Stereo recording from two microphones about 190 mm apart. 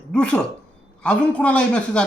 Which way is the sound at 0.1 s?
5° left (ahead or behind).